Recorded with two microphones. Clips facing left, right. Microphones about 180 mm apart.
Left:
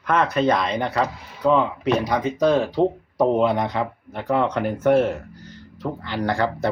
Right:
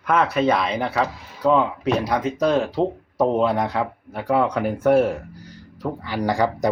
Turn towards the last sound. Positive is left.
turn(degrees=-15)  # may be behind; listen again after turning